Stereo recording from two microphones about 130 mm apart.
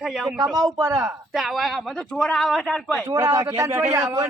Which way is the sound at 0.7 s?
25° right (ahead or behind).